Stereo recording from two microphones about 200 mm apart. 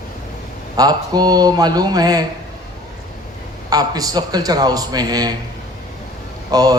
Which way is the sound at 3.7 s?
20° right (ahead or behind).